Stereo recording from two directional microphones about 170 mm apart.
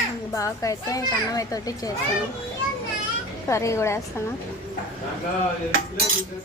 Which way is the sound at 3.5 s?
15° left (ahead or behind).